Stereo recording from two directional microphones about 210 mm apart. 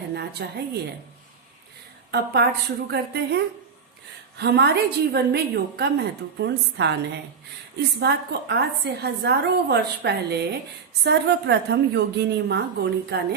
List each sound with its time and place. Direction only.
0.1 s a woman's voice: 50° right (ahead or behind)
2.0 s a woman's voice: 50° right (ahead or behind)
7.9 s a woman's voice: 50° right (ahead or behind)